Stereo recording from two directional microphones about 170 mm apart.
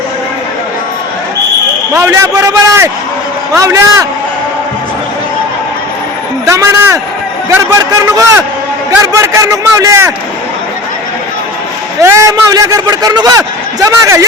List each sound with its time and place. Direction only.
1.9 s a man's voice: 15° right (ahead or behind)
6.5 s a man's voice: 15° right (ahead or behind)
12.0 s a man's voice: 20° right (ahead or behind)